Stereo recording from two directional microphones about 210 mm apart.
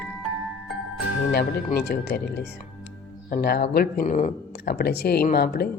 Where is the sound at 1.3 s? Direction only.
50° left (ahead or behind).